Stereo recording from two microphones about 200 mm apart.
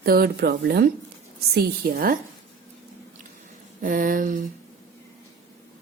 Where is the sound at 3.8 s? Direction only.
40° right (ahead or behind).